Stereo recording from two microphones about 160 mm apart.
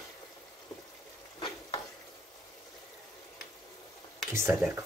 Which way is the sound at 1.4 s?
30° left (ahead or behind).